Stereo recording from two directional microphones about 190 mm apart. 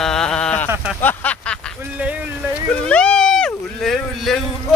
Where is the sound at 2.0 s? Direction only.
5° right (ahead or behind).